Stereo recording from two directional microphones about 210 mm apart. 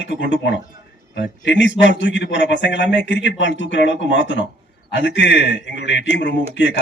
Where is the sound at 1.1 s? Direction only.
60° left (ahead or behind).